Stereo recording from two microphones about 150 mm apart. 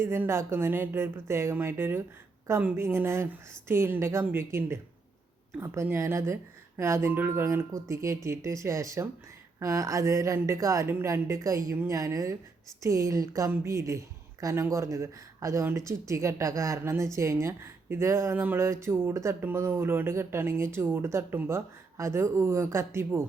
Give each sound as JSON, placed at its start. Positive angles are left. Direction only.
{"t": 0.0, "sound": "speech", "side_deg": -15}